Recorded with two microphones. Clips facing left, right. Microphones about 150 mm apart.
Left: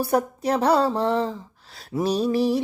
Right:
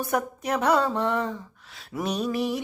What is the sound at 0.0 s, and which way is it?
Speech, 35° left (ahead or behind).